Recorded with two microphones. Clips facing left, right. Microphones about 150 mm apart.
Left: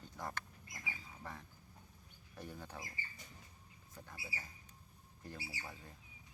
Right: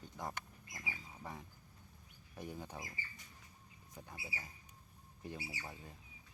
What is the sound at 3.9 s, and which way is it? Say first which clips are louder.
Speech: right 1 dB; 20° right (ahead or behind).